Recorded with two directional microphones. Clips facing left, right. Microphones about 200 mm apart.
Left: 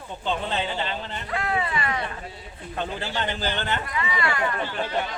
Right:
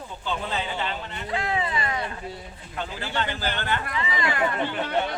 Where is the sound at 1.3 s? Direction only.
25° right (ahead or behind).